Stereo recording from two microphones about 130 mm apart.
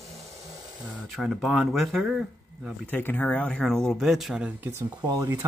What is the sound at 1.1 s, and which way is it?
Speech, centre (ahead or behind).